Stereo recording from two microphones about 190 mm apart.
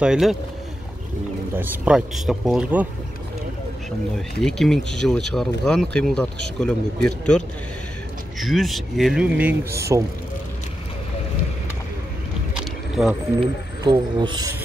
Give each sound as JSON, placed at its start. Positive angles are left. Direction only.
{"t": 0.0, "sound": "speech", "side_deg": 0}
{"t": 1.5, "sound": "speech", "side_deg": -10}
{"t": 4.4, "sound": "speech", "side_deg": 0}
{"t": 13.8, "sound": "speech", "side_deg": -20}